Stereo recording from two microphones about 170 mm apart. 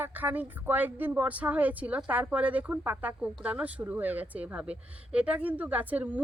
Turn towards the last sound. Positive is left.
turn(degrees=-10)  # may be behind; listen again after turning